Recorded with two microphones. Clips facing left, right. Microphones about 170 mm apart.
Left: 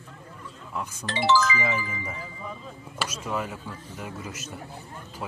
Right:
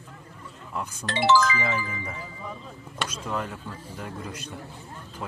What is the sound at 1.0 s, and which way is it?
Speech, 60° right (ahead or behind).